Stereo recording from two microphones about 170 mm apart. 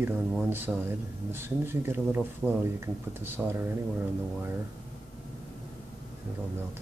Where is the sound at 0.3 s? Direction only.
10° right (ahead or behind).